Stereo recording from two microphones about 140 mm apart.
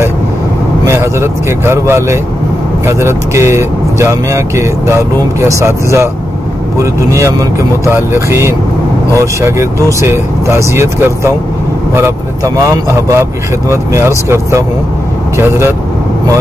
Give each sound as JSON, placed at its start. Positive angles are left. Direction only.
{"t": 0.8, "sound": "speech", "side_deg": -20}
{"t": 12.6, "sound": "speech", "side_deg": -20}